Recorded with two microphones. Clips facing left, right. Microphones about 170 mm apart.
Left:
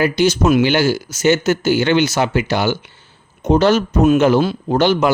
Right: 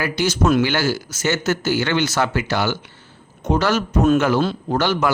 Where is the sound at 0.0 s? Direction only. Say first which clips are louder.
Left 5 dB; 20° left (ahead or behind).